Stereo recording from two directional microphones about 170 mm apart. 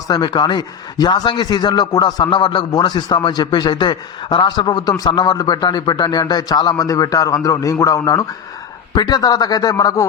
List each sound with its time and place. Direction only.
0.1 s a man's voice: 25° left (ahead or behind)